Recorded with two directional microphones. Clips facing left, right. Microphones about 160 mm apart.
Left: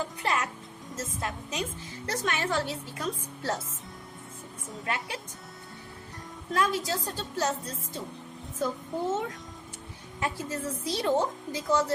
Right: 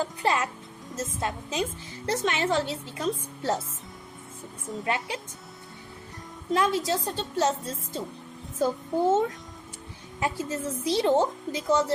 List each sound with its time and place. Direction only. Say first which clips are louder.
0.2 s music: right 4 dB; 30° right (ahead or behind)
0.9 s a woman's voice: right 4 dB; 25° right (ahead or behind)
4.9 s a woman's voice: right 4 dB; 20° right (ahead or behind)
6.5 s a woman's voice: right 3 dB; 25° right (ahead or behind)
8.6 s a child's voice: right 6 dB; 30° right (ahead or behind)